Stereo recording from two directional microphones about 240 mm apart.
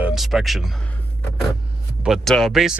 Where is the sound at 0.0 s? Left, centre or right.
Centre.